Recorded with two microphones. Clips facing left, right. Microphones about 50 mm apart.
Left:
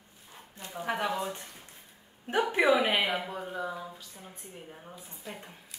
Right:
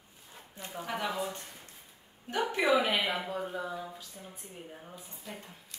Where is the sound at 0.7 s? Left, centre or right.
Centre.